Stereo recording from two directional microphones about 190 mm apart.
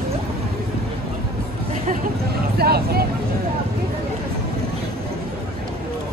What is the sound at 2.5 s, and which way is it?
Speech, 55° right (ahead or behind).